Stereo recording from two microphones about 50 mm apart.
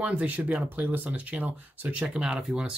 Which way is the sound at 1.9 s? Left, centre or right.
Right.